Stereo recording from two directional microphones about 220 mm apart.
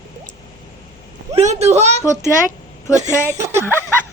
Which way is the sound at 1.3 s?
30° right (ahead or behind).